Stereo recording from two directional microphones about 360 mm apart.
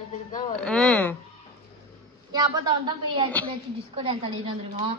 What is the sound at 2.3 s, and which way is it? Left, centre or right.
A woman's voice, centre.